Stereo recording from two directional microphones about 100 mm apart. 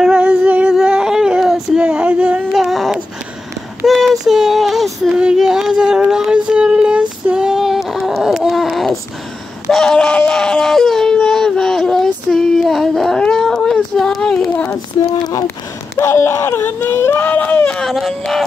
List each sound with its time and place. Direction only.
0.0 s female singing: 10° right (ahead or behind)
3.8 s child singing: centre (ahead or behind)
5.2 s a sound: 5° right (ahead or behind)
16.0 s speech: 25° left (ahead or behind); by 18.4 s centre (ahead or behind)